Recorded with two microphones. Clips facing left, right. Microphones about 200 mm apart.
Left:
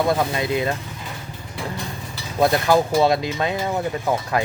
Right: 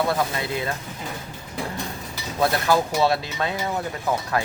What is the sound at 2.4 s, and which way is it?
Speech, 20° left (ahead or behind).